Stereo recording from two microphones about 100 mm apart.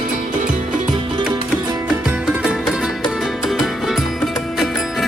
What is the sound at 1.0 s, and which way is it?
Music, 55° right (ahead or behind).